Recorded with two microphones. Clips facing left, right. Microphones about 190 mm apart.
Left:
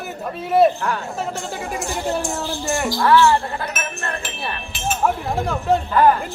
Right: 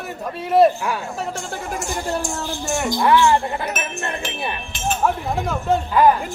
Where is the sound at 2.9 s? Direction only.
20° right (ahead or behind).